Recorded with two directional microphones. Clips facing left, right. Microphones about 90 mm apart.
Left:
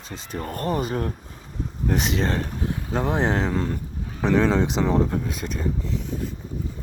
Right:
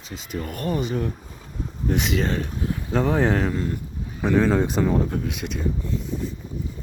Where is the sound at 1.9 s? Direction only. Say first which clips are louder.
Even; 35° left (ahead or behind).